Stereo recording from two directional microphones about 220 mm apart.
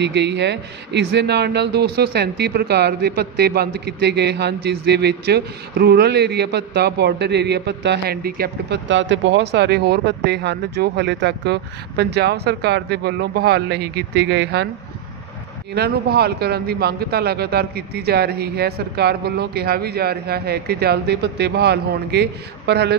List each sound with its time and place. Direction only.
0.0 s a man's voice: 50° right (ahead or behind)
15.7 s a man's voice: 45° right (ahead or behind)